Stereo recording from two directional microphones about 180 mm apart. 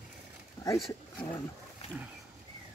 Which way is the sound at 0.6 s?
20° left (ahead or behind).